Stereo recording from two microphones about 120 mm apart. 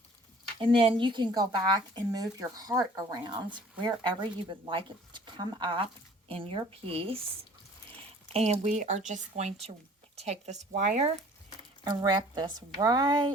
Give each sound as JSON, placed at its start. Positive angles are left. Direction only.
{"t": 0.6, "sound": "speech", "side_deg": -45}
{"t": 8.3, "sound": "speech", "side_deg": -60}
{"t": 8.6, "sound": "speech", "side_deg": -80}
{"t": 11.9, "sound": "speech", "side_deg": -35}